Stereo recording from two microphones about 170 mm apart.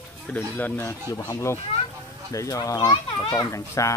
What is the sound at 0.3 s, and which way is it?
A child's voice, 10° left (ahead or behind).